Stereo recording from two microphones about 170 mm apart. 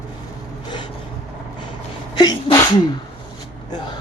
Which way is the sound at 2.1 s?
20° left (ahead or behind).